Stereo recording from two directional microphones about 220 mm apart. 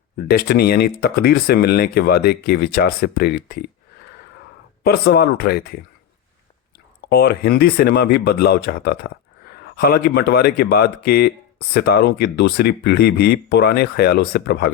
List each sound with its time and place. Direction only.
0.3 s speech: 45° left (ahead or behind)
4.8 s speech: 45° left (ahead or behind)
7.1 s speech: 45° left (ahead or behind)